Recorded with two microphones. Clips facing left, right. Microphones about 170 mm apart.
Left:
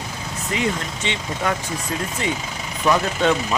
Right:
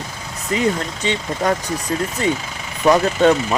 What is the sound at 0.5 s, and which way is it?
Speech, 40° right (ahead or behind).